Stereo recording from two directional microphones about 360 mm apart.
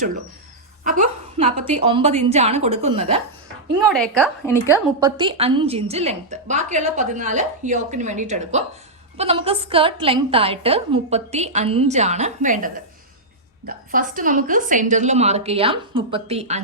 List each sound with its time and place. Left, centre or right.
0.9 s a sound: right
1.7 s a woman's voice: centre
3.9 s a woman's voice: centre
4.9 s a woman's voice: centre